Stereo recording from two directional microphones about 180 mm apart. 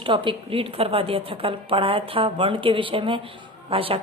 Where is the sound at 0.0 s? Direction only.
30° right (ahead or behind).